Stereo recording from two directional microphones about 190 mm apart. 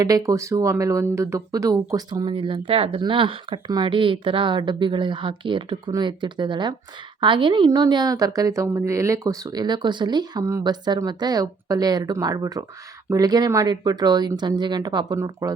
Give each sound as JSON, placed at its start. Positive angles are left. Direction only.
{"t": 0.0, "sound": "speech", "side_deg": -20}